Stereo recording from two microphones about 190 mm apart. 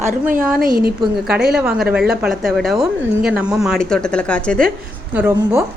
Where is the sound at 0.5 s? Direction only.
50° right (ahead or behind).